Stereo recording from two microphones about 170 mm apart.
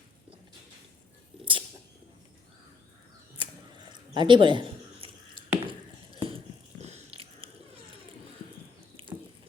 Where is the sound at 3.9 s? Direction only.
25° right (ahead or behind).